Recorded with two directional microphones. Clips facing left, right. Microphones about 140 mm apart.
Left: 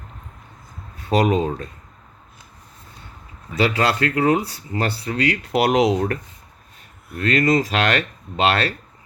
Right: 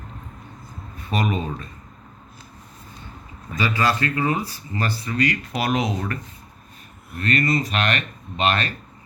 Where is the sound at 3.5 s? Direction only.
70° left (ahead or behind).